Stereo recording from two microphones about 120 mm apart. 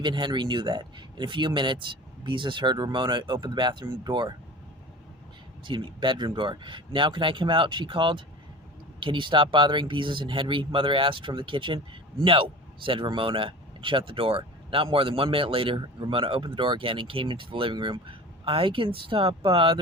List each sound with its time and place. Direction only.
0.0 s speech: 40° right (ahead or behind)
5.6 s a man's voice: 45° right (ahead or behind)